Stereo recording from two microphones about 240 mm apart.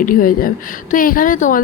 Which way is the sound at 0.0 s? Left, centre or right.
Left.